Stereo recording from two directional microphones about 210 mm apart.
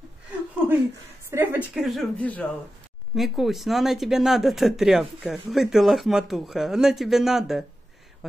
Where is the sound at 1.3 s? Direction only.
10° right (ahead or behind).